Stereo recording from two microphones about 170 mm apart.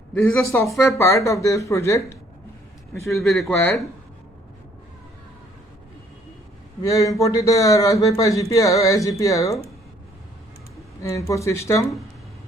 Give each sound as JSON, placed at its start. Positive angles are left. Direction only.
{"t": 0.1, "sound": "a man's voice", "side_deg": 15}
{"t": 3.2, "sound": "speech", "side_deg": 0}
{"t": 6.8, "sound": "a man's voice", "side_deg": 20}
{"t": 11.0, "sound": "speech", "side_deg": 15}